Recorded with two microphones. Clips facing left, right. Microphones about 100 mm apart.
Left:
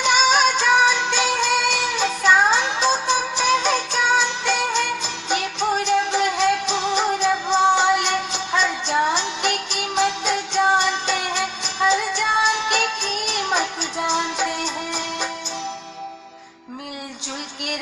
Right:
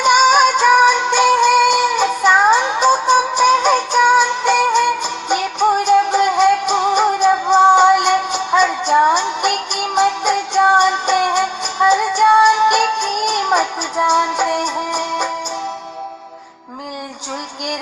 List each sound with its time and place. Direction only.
0.0 s music: 55° right (ahead or behind)
12.6 s music: 10° right (ahead or behind)
13.2 s music: 50° right (ahead or behind)